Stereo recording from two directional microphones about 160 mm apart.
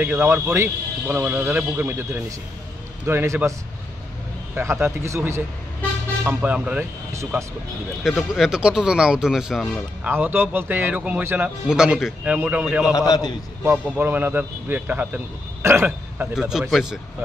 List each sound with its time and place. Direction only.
0.0 s a man's voice: 10° right (ahead or behind)
4.6 s a man's voice: 15° right (ahead or behind)
8.0 s speech: 5° right (ahead or behind)
10.1 s a man's voice: 15° right (ahead or behind)
12.9 s a man's voice: 20° left (ahead or behind)
13.7 s a man's voice: 10° right (ahead or behind)
16.3 s speech: 5° right (ahead or behind)